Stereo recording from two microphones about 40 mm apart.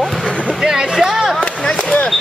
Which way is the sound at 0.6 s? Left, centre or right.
Centre.